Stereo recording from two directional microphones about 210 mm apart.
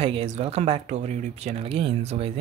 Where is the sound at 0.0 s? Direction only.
30° right (ahead or behind).